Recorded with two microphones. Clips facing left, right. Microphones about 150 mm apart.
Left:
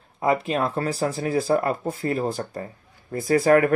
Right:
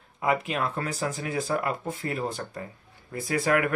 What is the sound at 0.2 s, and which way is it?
Speech, 35° left (ahead or behind).